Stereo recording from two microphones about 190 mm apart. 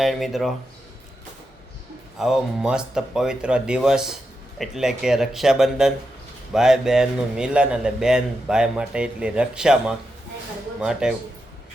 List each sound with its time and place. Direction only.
0.0 s a man's voice: centre (ahead or behind)
2.1 s a man's voice: centre (ahead or behind)